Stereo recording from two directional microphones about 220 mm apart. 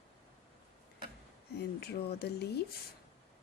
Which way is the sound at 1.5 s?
45° left (ahead or behind).